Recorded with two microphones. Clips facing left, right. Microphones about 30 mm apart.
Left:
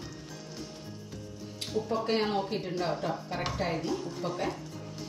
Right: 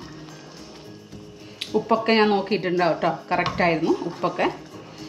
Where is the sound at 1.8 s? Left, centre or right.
Right.